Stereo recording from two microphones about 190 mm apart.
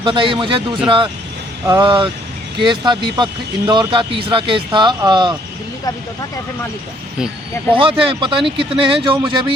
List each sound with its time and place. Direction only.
0.0 s speech: 25° right (ahead or behind)
7.7 s speech: 25° right (ahead or behind)